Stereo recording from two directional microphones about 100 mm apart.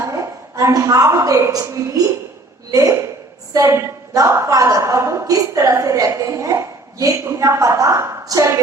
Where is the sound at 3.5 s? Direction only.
35° right (ahead or behind).